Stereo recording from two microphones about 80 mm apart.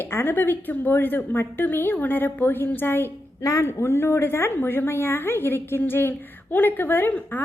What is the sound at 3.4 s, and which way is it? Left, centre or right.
Speech, left.